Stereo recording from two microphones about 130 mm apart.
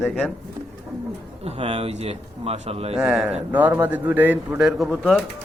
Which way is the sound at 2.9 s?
5° right (ahead or behind).